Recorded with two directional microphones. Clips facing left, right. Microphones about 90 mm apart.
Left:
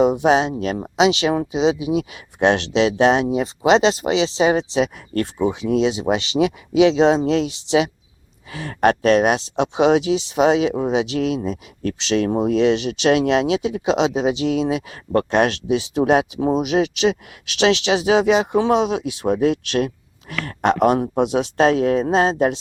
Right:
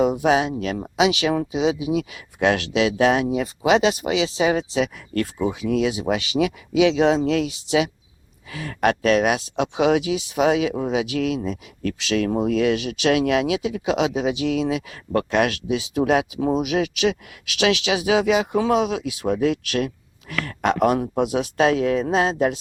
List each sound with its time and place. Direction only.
0.0 s speech: 25° left (ahead or behind)